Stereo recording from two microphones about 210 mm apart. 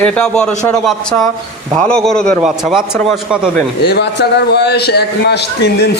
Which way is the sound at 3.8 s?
55° left (ahead or behind).